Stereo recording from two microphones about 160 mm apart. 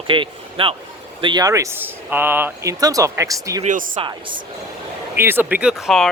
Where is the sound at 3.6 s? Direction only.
55° right (ahead or behind).